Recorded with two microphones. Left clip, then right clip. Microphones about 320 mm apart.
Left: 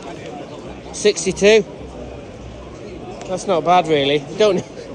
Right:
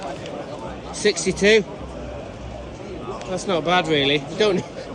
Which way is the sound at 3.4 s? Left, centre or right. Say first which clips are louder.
Left 5 dB; centre.